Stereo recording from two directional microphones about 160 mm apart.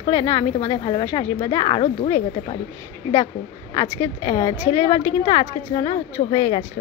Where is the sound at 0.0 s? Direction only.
25° left (ahead or behind).